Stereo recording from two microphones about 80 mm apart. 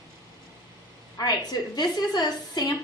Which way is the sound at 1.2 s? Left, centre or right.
Left.